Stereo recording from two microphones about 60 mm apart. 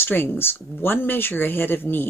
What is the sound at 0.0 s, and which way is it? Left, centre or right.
Speech, left.